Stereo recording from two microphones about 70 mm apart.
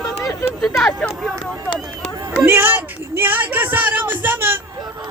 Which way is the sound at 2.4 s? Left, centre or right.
Right.